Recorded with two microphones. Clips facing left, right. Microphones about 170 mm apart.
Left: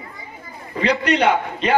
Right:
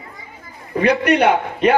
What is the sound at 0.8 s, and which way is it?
Speech, 55° right (ahead or behind).